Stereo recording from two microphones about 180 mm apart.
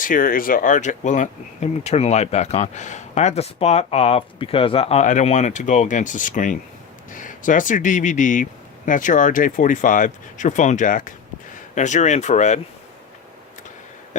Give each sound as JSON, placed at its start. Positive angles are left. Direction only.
{"t": 0.0, "sound": "speech", "side_deg": 50}